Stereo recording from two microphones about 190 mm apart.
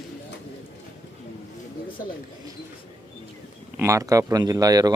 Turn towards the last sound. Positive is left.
turn(degrees=-20)  # may be behind; listen again after turning